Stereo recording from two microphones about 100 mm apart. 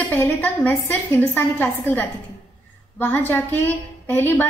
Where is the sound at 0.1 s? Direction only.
20° left (ahead or behind).